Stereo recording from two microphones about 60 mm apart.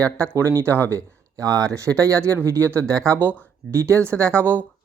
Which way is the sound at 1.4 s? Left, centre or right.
Right.